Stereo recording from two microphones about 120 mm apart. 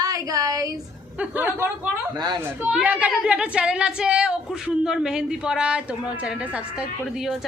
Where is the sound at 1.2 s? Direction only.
15° right (ahead or behind).